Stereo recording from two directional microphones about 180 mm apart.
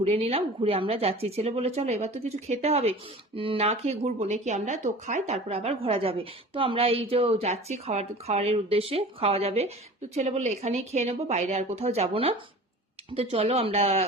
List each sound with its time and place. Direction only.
0.0 s a woman's voice: 35° right (ahead or behind)